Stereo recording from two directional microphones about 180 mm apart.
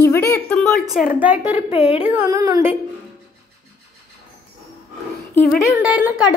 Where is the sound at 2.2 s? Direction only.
20° right (ahead or behind).